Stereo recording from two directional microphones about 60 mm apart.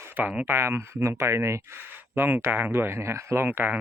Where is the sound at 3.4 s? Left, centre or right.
Right.